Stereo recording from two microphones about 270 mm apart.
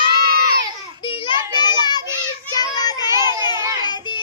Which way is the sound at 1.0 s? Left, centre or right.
Centre.